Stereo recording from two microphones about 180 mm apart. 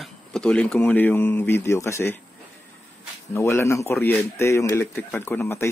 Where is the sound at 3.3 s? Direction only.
15° left (ahead or behind).